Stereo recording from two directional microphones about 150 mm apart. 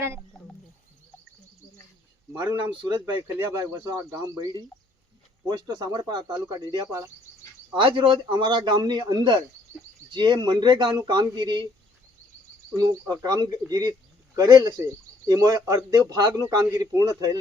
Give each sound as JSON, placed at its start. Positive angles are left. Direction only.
{"t": 2.4, "sound": "a man's voice", "side_deg": -20}
{"t": 12.7, "sound": "a man's voice", "side_deg": -25}